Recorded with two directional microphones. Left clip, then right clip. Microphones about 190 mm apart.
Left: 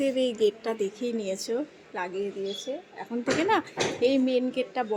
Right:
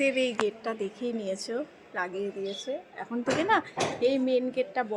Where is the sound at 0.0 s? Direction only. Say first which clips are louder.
Left 2 dB; 10° left (ahead or behind).